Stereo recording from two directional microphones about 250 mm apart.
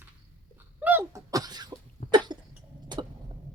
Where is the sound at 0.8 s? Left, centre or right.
Centre.